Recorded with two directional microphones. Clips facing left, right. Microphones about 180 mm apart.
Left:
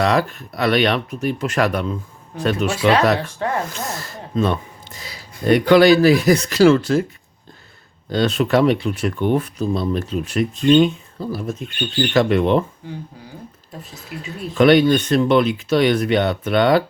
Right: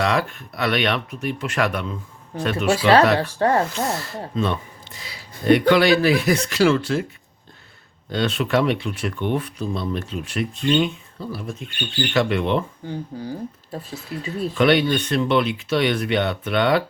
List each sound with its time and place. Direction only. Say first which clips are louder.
0.0 s speech: left 4 dB; 40° left (ahead or behind)
3.2 s speech: right 4 dB; 35° right (ahead or behind)
3.9 s speech: left 2 dB; 45° left (ahead or behind)
8.1 s speech: left 4 dB; 40° left (ahead or behind)
12.8 s speech: right 4 dB; 30° right (ahead or behind)
14.5 s speech: left 5 dB; 40° left (ahead or behind)